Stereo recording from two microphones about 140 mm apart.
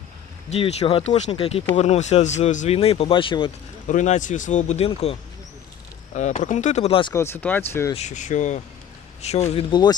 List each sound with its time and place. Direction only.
0.5 s speech: 45° left (ahead or behind)
2.7 s speech: 45° left (ahead or behind)
3.8 s speech: 60° left (ahead or behind)
4.9 s speech: 45° left (ahead or behind)
6.1 s speech: 55° left (ahead or behind)
7.1 s speech: 15° left (ahead or behind)
7.9 s speech: 55° left (ahead or behind)